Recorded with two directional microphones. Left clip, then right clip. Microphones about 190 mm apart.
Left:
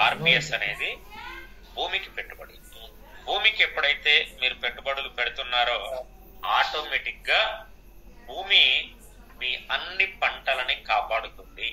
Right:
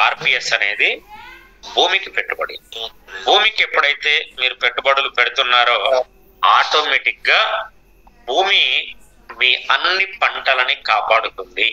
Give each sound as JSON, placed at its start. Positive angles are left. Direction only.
{"t": 0.0, "sound": "a man's voice", "side_deg": -45}